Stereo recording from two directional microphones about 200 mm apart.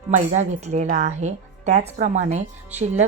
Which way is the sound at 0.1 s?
35° right (ahead or behind).